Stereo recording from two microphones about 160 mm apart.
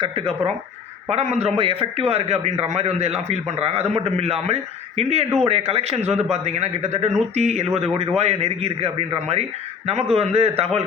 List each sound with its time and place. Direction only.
0.0 s a man's voice: 35° right (ahead or behind)